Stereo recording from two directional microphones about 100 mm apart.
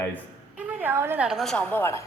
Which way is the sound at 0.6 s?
20° right (ahead or behind).